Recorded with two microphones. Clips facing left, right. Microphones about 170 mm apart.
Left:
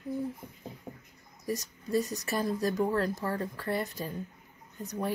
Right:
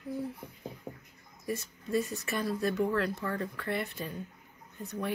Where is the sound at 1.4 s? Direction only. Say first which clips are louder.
Left 1 dB; 40° left (ahead or behind).